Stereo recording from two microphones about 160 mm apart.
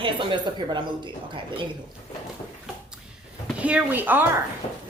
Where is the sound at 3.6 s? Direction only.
10° right (ahead or behind).